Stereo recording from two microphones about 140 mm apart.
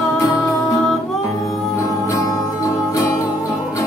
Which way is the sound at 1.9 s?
25° left (ahead or behind).